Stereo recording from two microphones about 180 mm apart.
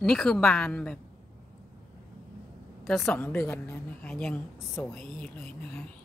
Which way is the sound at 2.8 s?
5° left (ahead or behind).